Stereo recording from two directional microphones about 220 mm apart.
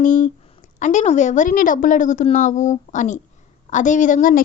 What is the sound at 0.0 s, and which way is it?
A woman's voice, 35° left (ahead or behind).